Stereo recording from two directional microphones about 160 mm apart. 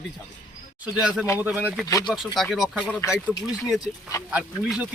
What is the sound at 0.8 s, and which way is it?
Speech, 5° right (ahead or behind).